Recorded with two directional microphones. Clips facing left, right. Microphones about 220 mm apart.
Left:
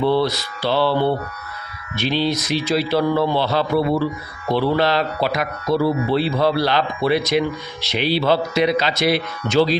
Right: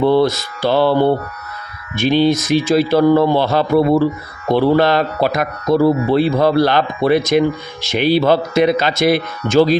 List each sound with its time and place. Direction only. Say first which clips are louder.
0.0 s speech: right 5 dB; 45° right (ahead or behind)